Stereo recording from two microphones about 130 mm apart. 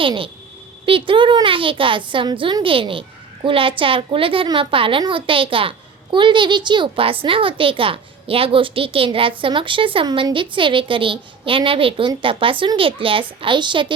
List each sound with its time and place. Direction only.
0.0 s a woman's voice: 40° right (ahead or behind)